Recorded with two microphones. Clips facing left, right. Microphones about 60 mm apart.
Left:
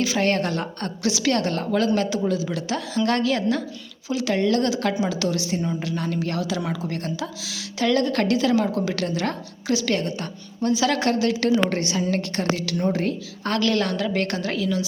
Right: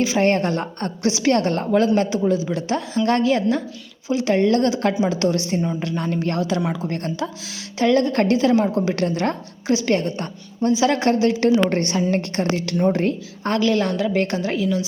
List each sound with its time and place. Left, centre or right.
0.0 s a woman's voice: right
13.5 s a woman's voice: centre